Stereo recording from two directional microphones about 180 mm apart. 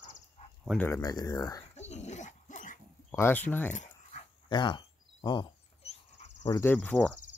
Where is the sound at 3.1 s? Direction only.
15° left (ahead or behind).